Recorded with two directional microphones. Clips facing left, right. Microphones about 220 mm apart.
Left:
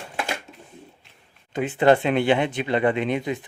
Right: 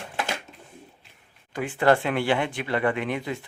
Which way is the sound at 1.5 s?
20° left (ahead or behind).